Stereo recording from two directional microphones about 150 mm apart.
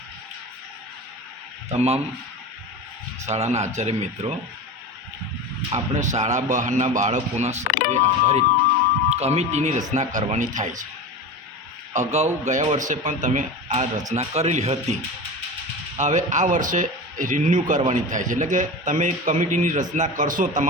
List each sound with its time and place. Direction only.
1.7 s a man's voice: 45° right (ahead or behind)
3.2 s a man's voice: 45° right (ahead or behind)
5.7 s a man's voice: 50° right (ahead or behind)
11.9 s a man's voice: 50° right (ahead or behind)
16.0 s a man's voice: 50° right (ahead or behind)